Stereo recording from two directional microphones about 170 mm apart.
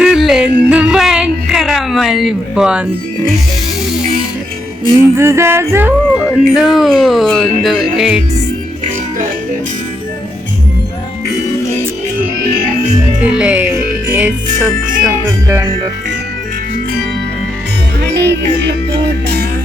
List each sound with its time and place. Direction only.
0.0 s music: 5° right (ahead or behind)
5.1 s music: 15° right (ahead or behind)
6.3 s speech: centre (ahead or behind)
13.2 s music: 5° right (ahead or behind)
18.1 s music: 85° right